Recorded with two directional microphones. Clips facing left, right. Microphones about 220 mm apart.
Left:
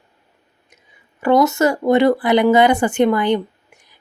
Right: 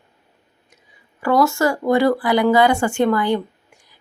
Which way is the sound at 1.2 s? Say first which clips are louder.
Left 3 dB; 20° left (ahead or behind).